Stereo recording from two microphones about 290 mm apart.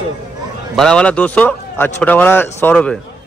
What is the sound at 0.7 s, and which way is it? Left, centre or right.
A man's voice, centre.